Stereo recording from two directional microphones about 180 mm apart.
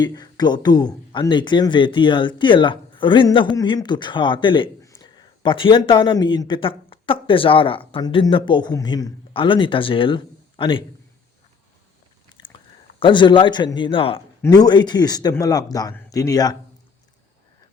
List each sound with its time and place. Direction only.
0.0 s speech: 20° left (ahead or behind)
12.4 s chewing: 45° right (ahead or behind)
13.0 s speech: 25° left (ahead or behind)